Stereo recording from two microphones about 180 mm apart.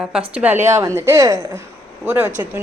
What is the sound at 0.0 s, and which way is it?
Speech, 5° right (ahead or behind).